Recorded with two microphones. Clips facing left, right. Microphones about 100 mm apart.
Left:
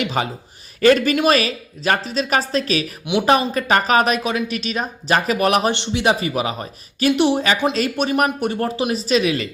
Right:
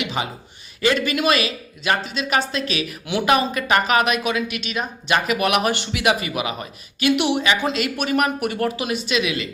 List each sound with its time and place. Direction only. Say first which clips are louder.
0.0 s a man's voice: left 4 dB; 45° left (ahead or behind)
3.1 s speech: left 4 dB; 20° left (ahead or behind)
3.5 s speech: left 2 dB; 35° left (ahead or behind)